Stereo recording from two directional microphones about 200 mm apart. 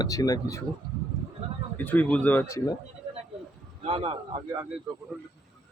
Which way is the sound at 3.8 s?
30° right (ahead or behind).